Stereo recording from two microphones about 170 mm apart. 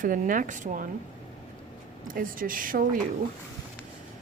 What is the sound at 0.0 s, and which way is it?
Speech, 55° right (ahead or behind).